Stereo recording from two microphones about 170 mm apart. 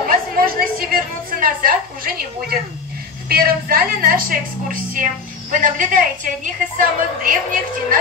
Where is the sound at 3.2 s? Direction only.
60° right (ahead or behind).